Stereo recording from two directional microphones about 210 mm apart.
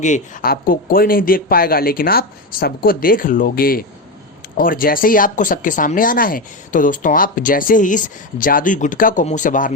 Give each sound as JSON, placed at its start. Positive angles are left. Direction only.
{"t": 0.0, "sound": "speech", "side_deg": 40}